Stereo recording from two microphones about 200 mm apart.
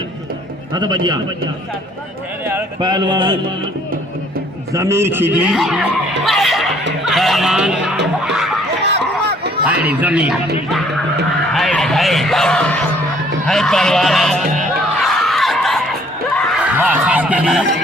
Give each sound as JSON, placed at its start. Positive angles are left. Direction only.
{"t": 0.7, "sound": "speech", "side_deg": -20}
{"t": 2.4, "sound": "speech", "side_deg": -10}
{"t": 4.7, "sound": "a man's voice", "side_deg": -15}
{"t": 8.9, "sound": "speech", "side_deg": -55}
{"t": 9.6, "sound": "a man's voice", "side_deg": -5}
{"t": 14.9, "sound": "screaming", "side_deg": 0}
{"t": 16.3, "sound": "a sound", "side_deg": -5}